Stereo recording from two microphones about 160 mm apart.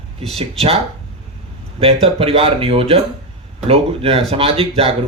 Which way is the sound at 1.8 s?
35° right (ahead or behind).